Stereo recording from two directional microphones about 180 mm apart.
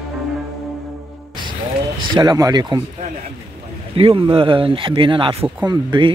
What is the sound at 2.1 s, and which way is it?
Speech, 20° right (ahead or behind).